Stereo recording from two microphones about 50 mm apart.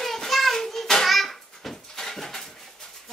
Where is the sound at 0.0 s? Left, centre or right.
Centre.